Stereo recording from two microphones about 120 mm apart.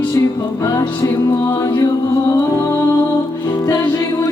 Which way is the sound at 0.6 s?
25° left (ahead or behind).